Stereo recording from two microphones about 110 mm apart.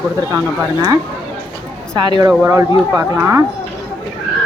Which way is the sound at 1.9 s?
40° right (ahead or behind).